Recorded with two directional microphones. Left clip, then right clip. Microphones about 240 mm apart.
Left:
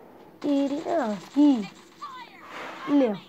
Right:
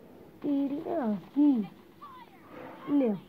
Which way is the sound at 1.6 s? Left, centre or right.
Centre.